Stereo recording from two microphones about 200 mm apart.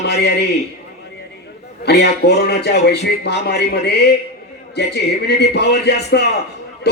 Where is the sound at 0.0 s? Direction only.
55° left (ahead or behind).